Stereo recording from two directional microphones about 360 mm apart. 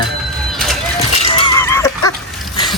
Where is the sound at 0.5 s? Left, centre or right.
Centre.